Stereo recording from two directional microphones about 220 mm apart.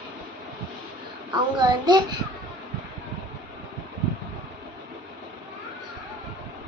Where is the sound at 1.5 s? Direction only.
20° right (ahead or behind).